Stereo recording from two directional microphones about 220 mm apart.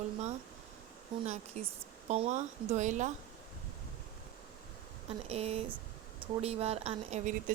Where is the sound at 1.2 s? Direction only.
30° right (ahead or behind).